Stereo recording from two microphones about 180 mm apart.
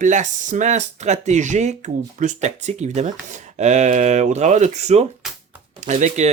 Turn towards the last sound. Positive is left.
turn(degrees=-40)  # may be behind; listen again after turning